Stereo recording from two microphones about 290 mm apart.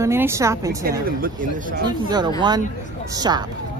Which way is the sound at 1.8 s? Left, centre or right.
Centre.